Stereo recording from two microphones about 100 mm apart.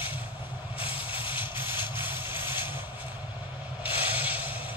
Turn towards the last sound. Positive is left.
turn(degrees=-15)  # may be behind; listen again after turning